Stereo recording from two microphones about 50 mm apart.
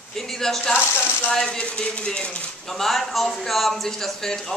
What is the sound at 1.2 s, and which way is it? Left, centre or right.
Speech, centre.